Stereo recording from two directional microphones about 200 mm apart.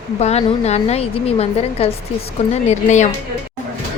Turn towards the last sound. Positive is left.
turn(degrees=35)  # may be behind; listen again after turning